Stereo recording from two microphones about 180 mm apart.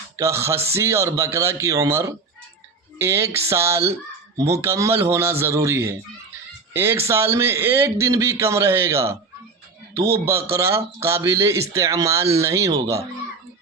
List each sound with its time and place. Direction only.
0.2 s a man's voice: 15° right (ahead or behind)